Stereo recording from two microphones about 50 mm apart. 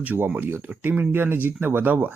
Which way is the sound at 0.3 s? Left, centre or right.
Right.